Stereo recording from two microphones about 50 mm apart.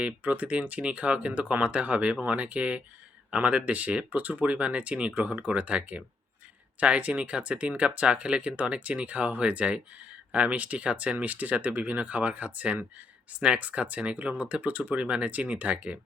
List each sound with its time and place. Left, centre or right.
0.0 s speech: right